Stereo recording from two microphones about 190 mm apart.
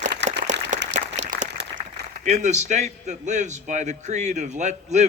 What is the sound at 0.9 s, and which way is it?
Applause, 40° right (ahead or behind).